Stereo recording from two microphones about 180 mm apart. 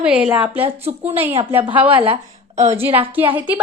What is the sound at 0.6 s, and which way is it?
Speech, 35° right (ahead or behind).